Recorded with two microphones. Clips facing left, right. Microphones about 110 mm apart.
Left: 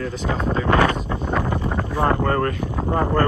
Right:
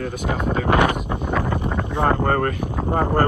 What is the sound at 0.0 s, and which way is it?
Speech, 50° right (ahead or behind).